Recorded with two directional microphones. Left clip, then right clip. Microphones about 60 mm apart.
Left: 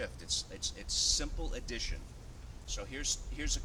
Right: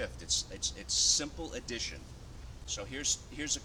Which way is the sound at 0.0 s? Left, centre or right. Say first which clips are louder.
Right 3 dB; left.